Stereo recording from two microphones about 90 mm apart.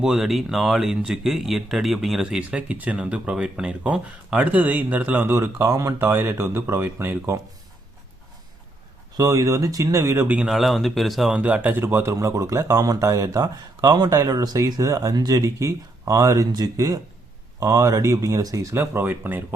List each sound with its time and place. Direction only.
0.0 s speech: 5° right (ahead or behind); by 7.3 s 25° right (ahead or behind)
9.1 s speech: 40° right (ahead or behind)
10.2 s speech: 20° right (ahead or behind)
10.4 s speech: centre (ahead or behind)
11.3 s speech: 15° right (ahead or behind)
12.1 s speech: 40° right (ahead or behind); by 19.5 s 25° right (ahead or behind)